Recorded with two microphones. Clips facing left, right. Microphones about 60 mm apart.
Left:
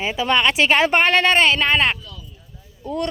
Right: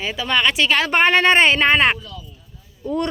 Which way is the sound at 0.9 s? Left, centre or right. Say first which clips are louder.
Right 1 dB; centre.